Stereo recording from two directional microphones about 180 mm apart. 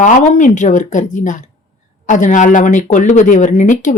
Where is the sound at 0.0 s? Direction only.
45° left (ahead or behind).